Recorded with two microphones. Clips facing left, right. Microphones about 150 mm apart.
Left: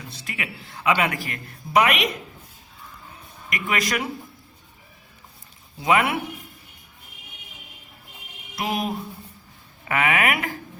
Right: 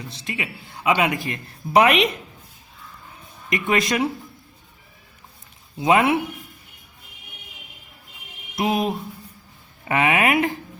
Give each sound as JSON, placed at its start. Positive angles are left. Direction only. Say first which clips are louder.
{"t": 0.1, "sound": "a man's voice", "louder": "right 2 dB", "side_deg": -20}
{"t": 3.5, "sound": "a man's voice", "louder": "right 5 dB", "side_deg": -25}
{"t": 5.8, "sound": "a man's voice", "louder": "right 3 dB", "side_deg": -25}
{"t": 8.5, "sound": "a man's voice", "louder": "right 4 dB", "side_deg": -20}